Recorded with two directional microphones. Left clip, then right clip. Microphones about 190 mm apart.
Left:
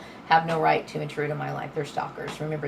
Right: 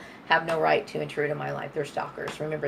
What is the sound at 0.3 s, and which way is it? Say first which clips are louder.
Speech: left 2 dB; 50° right (ahead or behind).